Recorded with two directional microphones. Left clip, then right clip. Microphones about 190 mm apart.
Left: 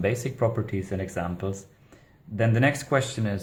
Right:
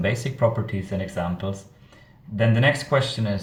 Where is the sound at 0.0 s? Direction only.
35° left (ahead or behind).